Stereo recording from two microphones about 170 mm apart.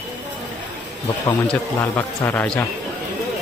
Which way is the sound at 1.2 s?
15° left (ahead or behind).